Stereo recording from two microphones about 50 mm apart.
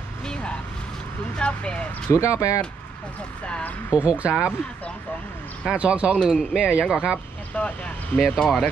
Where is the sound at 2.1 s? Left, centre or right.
Left.